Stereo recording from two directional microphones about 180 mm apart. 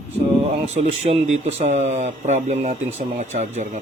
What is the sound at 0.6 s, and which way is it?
Speech, 40° right (ahead or behind).